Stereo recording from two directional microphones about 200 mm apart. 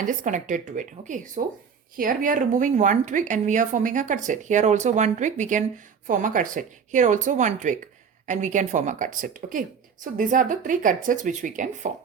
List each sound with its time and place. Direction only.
0.0 s speech: 40° right (ahead or behind)